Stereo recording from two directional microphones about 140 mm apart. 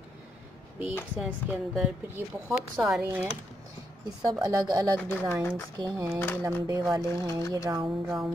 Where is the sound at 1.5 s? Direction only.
10° right (ahead or behind).